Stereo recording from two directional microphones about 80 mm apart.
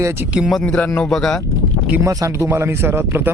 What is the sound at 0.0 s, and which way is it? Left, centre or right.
Speech, right.